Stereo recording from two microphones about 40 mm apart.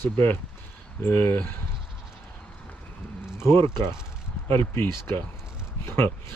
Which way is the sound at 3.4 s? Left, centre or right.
Left.